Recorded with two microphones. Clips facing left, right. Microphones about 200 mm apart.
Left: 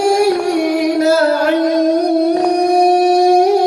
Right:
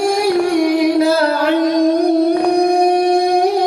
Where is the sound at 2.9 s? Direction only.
45° left (ahead or behind).